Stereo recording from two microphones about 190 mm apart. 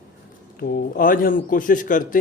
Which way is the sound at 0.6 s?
50° left (ahead or behind).